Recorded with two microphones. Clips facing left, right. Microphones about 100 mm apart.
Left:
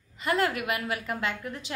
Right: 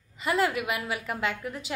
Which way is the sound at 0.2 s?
Centre (ahead or behind).